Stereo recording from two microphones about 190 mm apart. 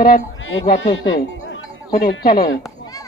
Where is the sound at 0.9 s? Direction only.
65° left (ahead or behind).